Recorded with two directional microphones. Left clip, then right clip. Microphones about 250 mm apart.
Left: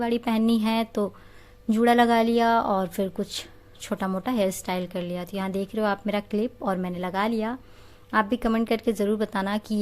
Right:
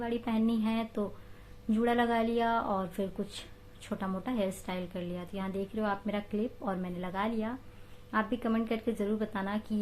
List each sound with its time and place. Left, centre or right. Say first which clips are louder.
0.0 s speech: left 8 dB; left